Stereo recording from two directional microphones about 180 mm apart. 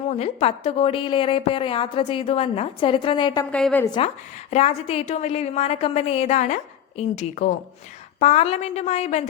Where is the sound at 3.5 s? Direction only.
5° left (ahead or behind).